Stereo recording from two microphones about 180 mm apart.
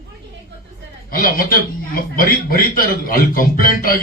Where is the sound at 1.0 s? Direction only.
55° left (ahead or behind).